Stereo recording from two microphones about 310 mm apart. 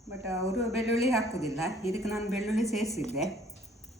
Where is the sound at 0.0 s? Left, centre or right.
Centre.